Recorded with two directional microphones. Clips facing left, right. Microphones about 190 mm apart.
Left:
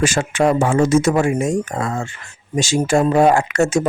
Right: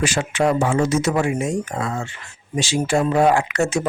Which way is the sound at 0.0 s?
45° left (ahead or behind).